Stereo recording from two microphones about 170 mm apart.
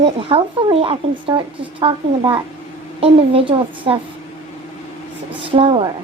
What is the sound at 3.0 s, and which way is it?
Speech, 30° right (ahead or behind).